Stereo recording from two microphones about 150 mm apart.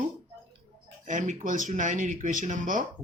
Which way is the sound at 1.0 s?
55° right (ahead or behind).